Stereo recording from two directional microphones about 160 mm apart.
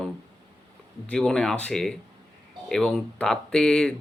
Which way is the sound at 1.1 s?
5° left (ahead or behind).